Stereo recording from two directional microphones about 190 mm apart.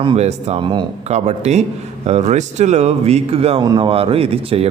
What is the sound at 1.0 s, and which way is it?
Speech, 35° right (ahead or behind).